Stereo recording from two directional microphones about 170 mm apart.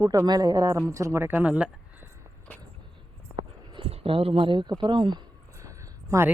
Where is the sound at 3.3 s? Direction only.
30° right (ahead or behind).